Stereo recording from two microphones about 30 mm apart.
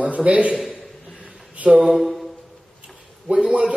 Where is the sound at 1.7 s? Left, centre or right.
Centre.